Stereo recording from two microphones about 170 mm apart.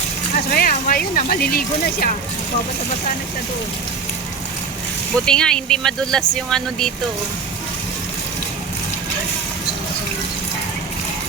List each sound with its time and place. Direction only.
0.5 s speech: 55° left (ahead or behind)
5.2 s speech: 5° left (ahead or behind)